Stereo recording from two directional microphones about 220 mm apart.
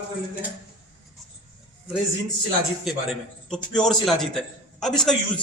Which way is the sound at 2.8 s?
Centre (ahead or behind).